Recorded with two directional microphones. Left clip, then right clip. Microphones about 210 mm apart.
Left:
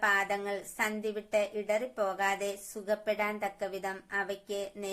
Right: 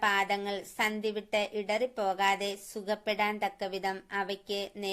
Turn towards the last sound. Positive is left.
turn(degrees=-30)  # may be behind; listen again after turning